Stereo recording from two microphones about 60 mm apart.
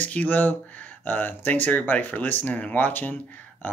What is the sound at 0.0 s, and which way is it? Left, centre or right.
Speech, left.